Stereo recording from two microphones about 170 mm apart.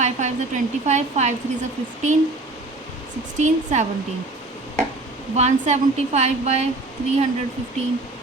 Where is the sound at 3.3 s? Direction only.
45° right (ahead or behind).